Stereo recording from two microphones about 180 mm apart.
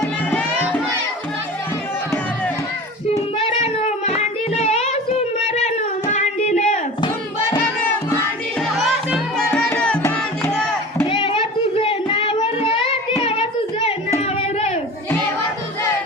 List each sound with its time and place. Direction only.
0.3 s music: 5° left (ahead or behind)
3.1 s child singing: 30° left (ahead or behind)
5.5 s a sound: 40° left (ahead or behind)
8.7 s music: centre (ahead or behind)
11.1 s child singing: 30° left (ahead or behind)